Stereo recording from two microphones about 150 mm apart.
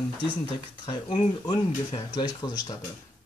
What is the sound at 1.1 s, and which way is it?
Speech, 35° left (ahead or behind).